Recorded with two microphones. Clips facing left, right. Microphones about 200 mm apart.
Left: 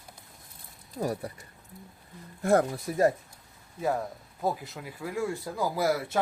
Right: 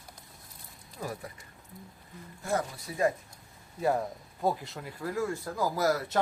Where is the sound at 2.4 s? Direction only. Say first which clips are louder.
Left 8 dB; 55° left (ahead or behind).